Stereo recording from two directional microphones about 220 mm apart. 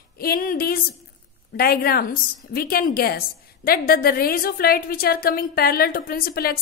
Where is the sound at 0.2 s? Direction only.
40° left (ahead or behind).